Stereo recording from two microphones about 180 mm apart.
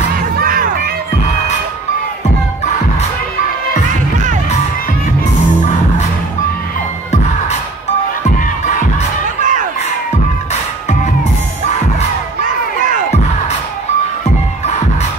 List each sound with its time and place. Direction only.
0.4 s music: 50° right (ahead or behind)
9.4 s crowd: 45° right (ahead or behind)